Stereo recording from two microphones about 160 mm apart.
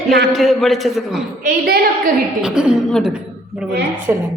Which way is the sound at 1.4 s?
70° right (ahead or behind).